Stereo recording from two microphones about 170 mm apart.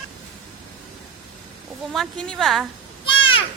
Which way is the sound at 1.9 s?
Centre (ahead or behind).